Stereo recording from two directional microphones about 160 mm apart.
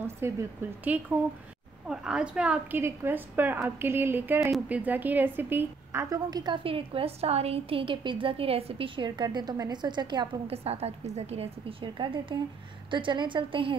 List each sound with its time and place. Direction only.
0.0 s a woman's voice: 15° right (ahead or behind); by 13.7 s 30° right (ahead or behind)